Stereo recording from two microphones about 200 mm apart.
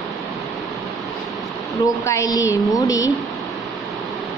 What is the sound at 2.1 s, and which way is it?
A woman's voice, 15° left (ahead or behind).